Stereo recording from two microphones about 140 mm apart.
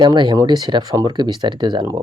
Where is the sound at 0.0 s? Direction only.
35° right (ahead or behind).